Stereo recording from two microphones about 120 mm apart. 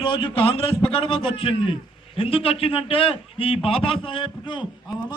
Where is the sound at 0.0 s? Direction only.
45° left (ahead or behind).